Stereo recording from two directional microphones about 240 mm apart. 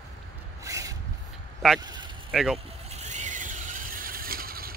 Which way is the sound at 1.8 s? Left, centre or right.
Centre.